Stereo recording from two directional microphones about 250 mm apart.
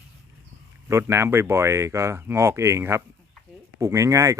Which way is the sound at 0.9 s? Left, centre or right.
Centre.